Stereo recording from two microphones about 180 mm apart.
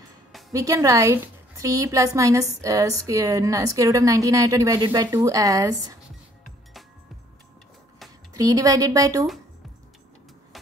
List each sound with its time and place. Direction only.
0.5 s a woman's voice: 20° right (ahead or behind)
8.3 s a woman's voice: 20° right (ahead or behind)